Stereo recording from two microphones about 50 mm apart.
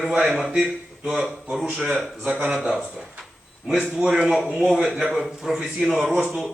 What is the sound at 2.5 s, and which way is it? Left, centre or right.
A man's voice, centre.